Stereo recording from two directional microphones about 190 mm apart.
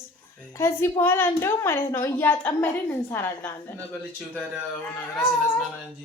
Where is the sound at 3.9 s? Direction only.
Centre (ahead or behind).